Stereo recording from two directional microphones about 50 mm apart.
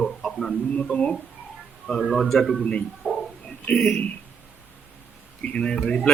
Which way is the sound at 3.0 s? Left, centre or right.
Centre.